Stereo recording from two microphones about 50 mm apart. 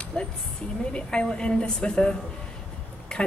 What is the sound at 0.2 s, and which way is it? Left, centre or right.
A man's voice, centre.